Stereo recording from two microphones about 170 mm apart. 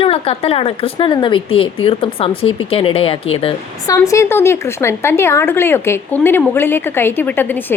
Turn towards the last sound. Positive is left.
turn(degrees=10)  # may be behind; listen again after turning